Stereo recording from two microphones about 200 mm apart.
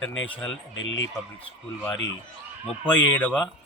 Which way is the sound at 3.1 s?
5° left (ahead or behind).